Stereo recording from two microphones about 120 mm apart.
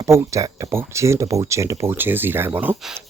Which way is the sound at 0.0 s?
25° right (ahead or behind).